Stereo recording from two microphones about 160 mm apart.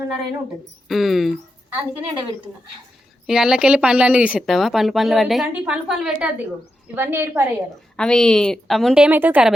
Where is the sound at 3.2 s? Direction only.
5° right (ahead or behind).